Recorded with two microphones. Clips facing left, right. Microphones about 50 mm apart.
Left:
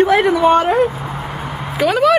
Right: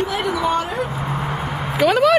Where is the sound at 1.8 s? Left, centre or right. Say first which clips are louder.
Left 1 dB; centre.